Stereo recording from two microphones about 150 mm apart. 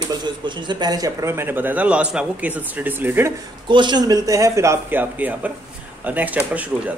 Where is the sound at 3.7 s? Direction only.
30° right (ahead or behind).